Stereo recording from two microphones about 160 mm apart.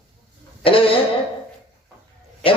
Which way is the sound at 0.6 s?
35° left (ahead or behind).